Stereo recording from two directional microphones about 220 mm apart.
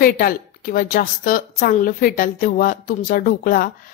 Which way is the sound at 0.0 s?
40° left (ahead or behind).